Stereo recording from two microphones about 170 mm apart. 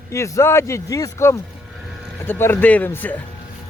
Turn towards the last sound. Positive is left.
turn(degrees=10)  # may be behind; listen again after turning